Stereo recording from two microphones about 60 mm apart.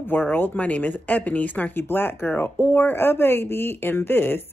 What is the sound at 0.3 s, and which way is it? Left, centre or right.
Speech, left.